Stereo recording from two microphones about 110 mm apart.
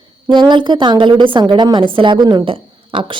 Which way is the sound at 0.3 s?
45° right (ahead or behind).